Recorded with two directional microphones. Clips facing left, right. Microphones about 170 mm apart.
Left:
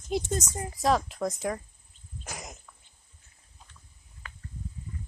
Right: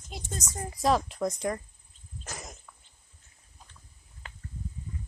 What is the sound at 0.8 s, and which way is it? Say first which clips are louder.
Speech: even; centre (ahead or behind).